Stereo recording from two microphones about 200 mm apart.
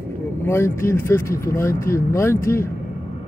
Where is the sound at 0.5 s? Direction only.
15° left (ahead or behind).